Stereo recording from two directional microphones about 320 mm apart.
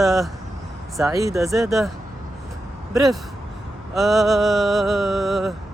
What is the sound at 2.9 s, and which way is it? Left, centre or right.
Speech, centre.